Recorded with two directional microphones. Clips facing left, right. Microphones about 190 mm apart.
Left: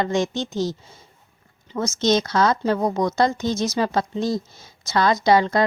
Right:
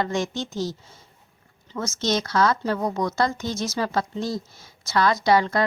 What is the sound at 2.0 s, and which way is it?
A woman's voice, 20° left (ahead or behind).